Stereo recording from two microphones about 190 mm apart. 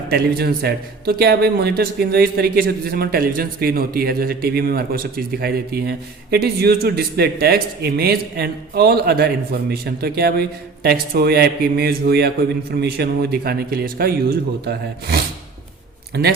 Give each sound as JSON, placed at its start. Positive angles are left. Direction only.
{"t": 0.1, "sound": "a man's voice", "side_deg": -55}